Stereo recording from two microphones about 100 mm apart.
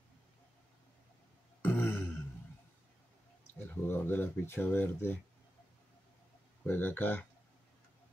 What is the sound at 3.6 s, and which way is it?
Speech, 20° left (ahead or behind).